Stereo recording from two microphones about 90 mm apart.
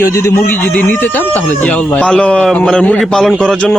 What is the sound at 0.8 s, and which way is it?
A man's voice, 20° left (ahead or behind).